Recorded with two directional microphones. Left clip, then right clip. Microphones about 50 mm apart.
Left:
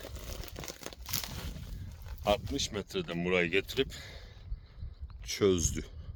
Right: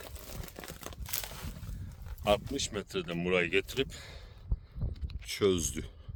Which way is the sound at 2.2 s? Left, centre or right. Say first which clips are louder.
Right 1 dB; centre.